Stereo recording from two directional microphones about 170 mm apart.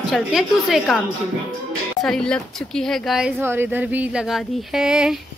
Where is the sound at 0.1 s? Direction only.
Centre (ahead or behind).